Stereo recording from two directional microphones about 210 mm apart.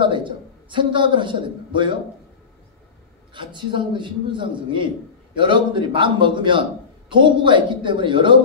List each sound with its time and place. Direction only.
0.0 s a man's voice: 20° right (ahead or behind)
3.3 s a man's voice: 20° right (ahead or behind)